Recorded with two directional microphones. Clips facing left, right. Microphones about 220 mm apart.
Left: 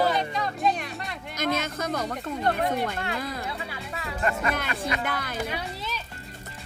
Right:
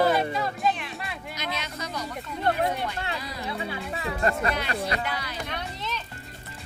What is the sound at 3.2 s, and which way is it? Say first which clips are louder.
Speech: left 4 dB; 50° left (ahead or behind).